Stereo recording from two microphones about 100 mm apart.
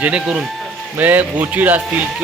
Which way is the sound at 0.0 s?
10° right (ahead or behind).